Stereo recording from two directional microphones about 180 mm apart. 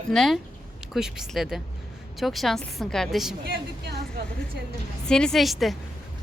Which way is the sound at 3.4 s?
65° right (ahead or behind).